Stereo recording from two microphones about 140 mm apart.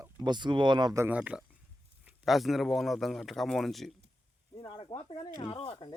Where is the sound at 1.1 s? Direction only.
10° right (ahead or behind).